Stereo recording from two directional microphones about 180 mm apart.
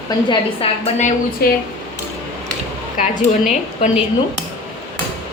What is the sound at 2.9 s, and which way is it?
A woman's voice, 45° left (ahead or behind).